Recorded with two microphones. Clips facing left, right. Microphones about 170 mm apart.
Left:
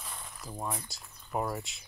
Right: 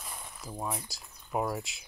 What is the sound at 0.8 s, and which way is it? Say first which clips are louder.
Speech: right 1 dB; centre (ahead or behind).